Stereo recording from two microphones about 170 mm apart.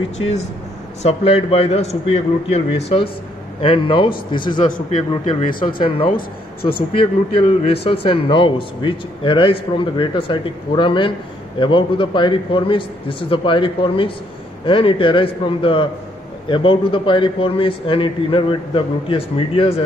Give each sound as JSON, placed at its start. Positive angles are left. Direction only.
{"t": 1.0, "sound": "a man's voice", "side_deg": 35}
{"t": 6.1, "sound": "speech", "side_deg": 65}
{"t": 6.9, "sound": "a man's voice", "side_deg": 30}